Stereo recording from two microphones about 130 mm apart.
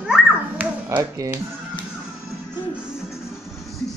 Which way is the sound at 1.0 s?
25° right (ahead or behind).